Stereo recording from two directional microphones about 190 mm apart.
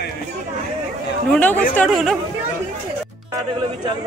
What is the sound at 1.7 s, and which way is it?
Speech, 5° left (ahead or behind).